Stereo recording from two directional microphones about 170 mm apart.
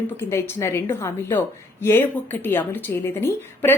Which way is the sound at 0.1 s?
15° left (ahead or behind).